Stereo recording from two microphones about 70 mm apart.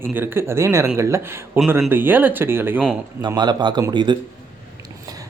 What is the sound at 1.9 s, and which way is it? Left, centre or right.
Speech, right.